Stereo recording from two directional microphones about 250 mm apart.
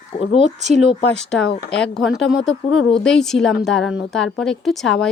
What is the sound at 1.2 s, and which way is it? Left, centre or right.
Speech, centre.